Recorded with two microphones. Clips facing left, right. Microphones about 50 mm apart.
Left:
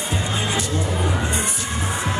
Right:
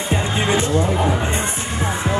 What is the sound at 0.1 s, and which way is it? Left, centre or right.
Music, right.